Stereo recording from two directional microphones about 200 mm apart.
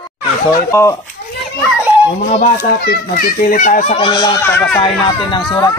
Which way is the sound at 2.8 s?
45° left (ahead or behind).